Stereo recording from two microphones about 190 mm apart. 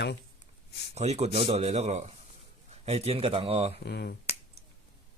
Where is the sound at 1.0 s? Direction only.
35° right (ahead or behind).